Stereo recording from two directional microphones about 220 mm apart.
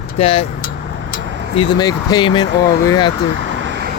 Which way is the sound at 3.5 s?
55° right (ahead or behind).